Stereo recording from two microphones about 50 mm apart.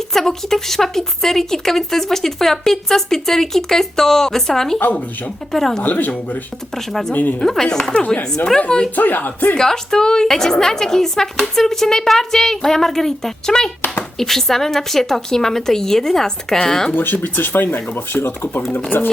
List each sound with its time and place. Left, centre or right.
0.1 s speech: centre
4.8 s speech: left
5.5 s speech: centre
5.8 s speech: left
6.7 s speech: centre
7.1 s speech: left
7.4 s speech: centre
9.0 s speech: left
9.6 s speech: centre
16.9 s speech: left